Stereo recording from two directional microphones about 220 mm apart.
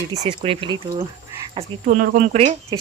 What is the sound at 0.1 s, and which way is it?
Speech, 25° right (ahead or behind).